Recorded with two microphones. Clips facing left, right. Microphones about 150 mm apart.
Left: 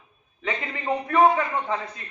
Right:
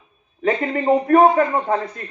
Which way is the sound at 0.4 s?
50° right (ahead or behind).